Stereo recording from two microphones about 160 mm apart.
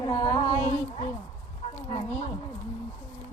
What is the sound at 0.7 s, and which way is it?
Speech, 40° left (ahead or behind).